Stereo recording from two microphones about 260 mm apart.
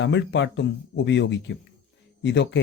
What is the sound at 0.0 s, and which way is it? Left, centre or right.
A man's voice, left.